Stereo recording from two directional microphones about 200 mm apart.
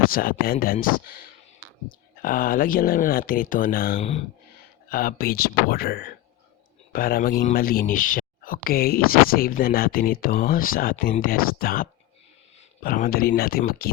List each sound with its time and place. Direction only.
0.0 s speech: 45° left (ahead or behind)
2.2 s speech: 45° left (ahead or behind)